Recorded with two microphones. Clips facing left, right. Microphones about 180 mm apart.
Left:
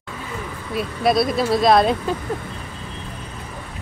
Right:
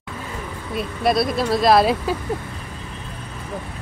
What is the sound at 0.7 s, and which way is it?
Speech, centre (ahead or behind).